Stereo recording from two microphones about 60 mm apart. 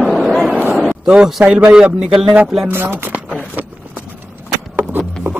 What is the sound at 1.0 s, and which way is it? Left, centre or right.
Speech, centre.